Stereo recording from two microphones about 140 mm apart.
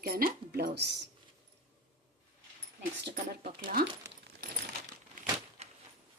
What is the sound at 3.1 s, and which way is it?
Speech, 85° right.